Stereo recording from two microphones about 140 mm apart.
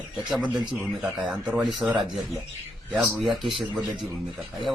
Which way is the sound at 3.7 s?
35° right (ahead or behind).